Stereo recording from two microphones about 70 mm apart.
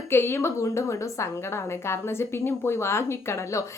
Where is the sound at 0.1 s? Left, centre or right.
Left.